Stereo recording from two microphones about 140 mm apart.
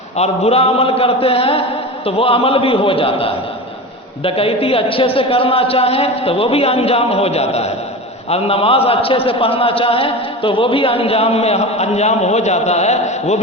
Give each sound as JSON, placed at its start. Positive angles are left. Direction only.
{"t": 0.2, "sound": "a man's voice", "side_deg": 45}